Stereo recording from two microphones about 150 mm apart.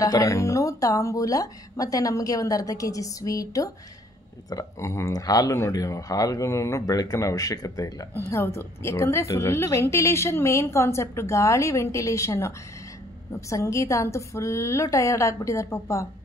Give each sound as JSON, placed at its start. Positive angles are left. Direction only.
{"t": 0.0, "sound": "speech", "side_deg": 20}